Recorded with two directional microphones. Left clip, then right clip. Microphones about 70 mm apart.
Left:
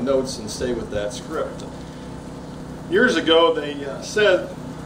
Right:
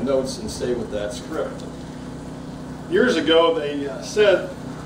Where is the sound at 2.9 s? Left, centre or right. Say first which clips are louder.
Left 1 dB; left.